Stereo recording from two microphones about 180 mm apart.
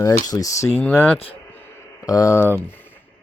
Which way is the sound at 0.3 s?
20° left (ahead or behind).